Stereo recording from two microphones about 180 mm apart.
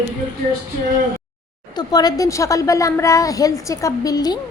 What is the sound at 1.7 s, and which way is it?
A woman's voice, 20° left (ahead or behind).